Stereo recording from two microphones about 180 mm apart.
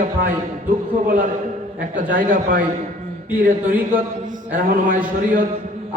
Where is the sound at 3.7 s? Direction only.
50° right (ahead or behind).